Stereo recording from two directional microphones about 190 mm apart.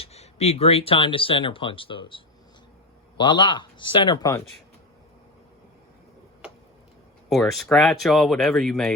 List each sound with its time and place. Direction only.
0.0 s speech: 35° left (ahead or behind)
7.3 s speech: centre (ahead or behind)